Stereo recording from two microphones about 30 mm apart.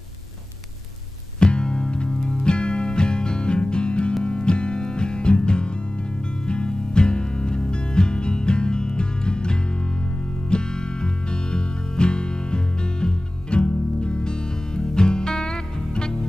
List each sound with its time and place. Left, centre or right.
1.4 s music: left